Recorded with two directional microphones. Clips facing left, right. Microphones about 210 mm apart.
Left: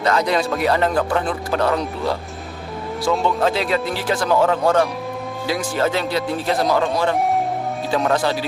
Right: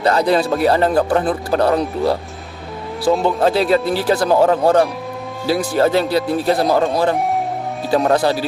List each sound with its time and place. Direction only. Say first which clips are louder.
0.0 s speech: right 4 dB; 35° right (ahead or behind)
3.2 s speech: right 4 dB; 35° right (ahead or behind)